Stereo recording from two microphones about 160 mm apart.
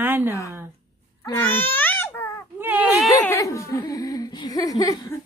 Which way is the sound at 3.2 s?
15° left (ahead or behind).